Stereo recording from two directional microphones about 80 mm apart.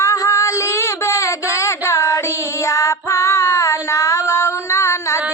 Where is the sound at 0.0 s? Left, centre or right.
Left.